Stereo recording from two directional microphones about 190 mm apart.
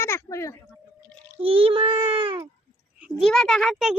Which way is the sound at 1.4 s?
30° right (ahead or behind).